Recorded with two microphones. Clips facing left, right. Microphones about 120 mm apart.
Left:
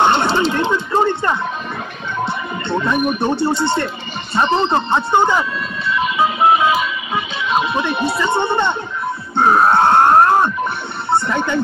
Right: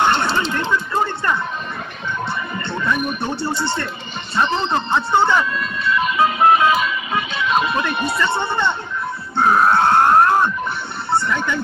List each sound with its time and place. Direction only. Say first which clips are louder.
0.0 s a sound: left 3 dB; 20° left (ahead or behind)
2.2 s music: left 3 dB; 20° left (ahead or behind)
4.4 s speech: left 4 dB; 20° left (ahead or behind)
6.1 s music: even; 10° left (ahead or behind)
8.2 s speech: left 3 dB; 20° left (ahead or behind)
9.4 s grunt: left 2 dB; 25° left (ahead or behind)
11.1 s speech: left 3 dB; 20° left (ahead or behind)